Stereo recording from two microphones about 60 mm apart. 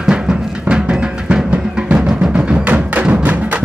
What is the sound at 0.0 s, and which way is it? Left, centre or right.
Music, centre.